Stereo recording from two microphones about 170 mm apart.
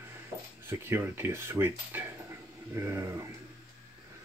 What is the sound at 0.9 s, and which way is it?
Speech, 15° right (ahead or behind).